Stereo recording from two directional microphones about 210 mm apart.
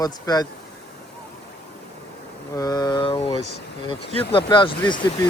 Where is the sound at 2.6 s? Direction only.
20° left (ahead or behind).